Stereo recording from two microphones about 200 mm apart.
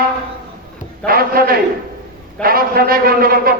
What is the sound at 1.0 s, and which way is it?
A man's voice, 45° right (ahead or behind).